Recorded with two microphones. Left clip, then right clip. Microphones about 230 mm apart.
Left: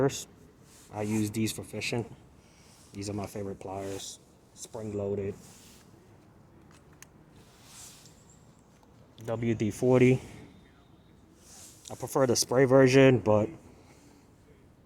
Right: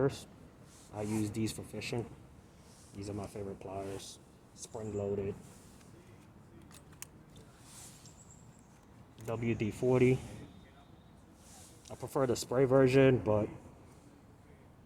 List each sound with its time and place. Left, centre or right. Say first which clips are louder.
0.0 s speech: left 5 dB; left
9.2 s speech: left 5 dB; left
11.9 s speech: left 6 dB; left